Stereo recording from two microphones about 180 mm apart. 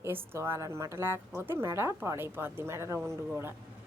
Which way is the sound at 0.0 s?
15° right (ahead or behind).